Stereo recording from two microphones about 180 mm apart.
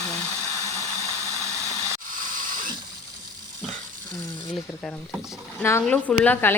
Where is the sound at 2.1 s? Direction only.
50° right (ahead or behind).